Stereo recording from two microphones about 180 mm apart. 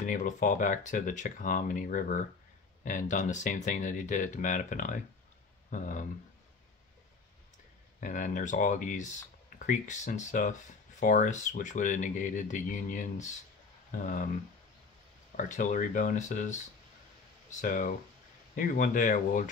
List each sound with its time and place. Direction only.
0.0 s speech: 45° left (ahead or behind)
8.0 s speech: 45° left (ahead or behind)
15.3 s speech: 45° left (ahead or behind)